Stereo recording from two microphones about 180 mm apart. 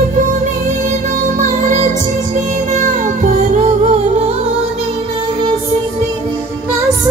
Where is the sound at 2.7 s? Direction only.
45° right (ahead or behind).